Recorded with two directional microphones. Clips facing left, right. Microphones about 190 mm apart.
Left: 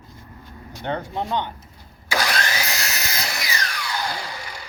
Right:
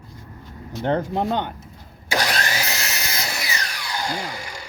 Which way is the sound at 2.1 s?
20° right (ahead or behind).